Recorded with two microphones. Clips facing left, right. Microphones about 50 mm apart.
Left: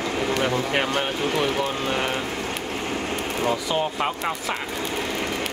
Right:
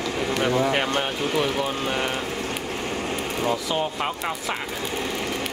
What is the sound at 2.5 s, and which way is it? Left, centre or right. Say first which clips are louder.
Vehicle: left 1 dB; centre.